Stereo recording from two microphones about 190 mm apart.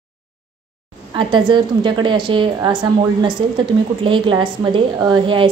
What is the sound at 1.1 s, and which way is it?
A woman's voice, 25° right (ahead or behind).